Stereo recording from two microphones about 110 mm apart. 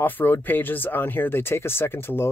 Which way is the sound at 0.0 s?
15° left (ahead or behind).